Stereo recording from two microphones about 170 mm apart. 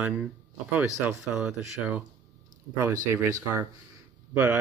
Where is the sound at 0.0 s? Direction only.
5° right (ahead or behind).